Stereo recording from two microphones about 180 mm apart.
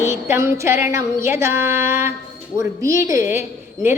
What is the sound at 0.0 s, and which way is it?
A woman's voice, 15° right (ahead or behind).